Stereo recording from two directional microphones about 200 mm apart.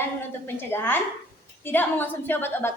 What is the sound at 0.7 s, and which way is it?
A woman's voice, 10° left (ahead or behind).